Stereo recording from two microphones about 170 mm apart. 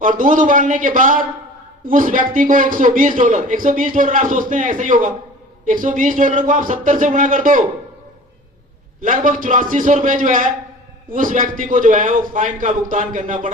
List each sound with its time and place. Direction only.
0.0 s a man's voice: 50° right (ahead or behind)
9.0 s a man's voice: 50° right (ahead or behind)